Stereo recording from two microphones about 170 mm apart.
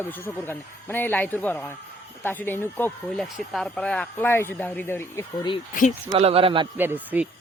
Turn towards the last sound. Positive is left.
turn(degrees=-10)  # may be behind; listen again after turning